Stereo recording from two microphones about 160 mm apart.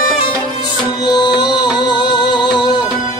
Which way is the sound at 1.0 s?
25° left (ahead or behind).